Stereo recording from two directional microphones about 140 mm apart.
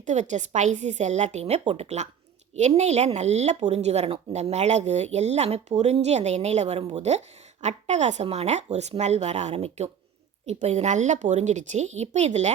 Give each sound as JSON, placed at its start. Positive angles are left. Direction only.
{"t": 0.0, "sound": "a woman's voice", "side_deg": -60}